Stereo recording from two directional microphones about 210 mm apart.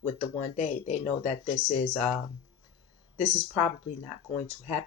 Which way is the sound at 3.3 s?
35° left (ahead or behind).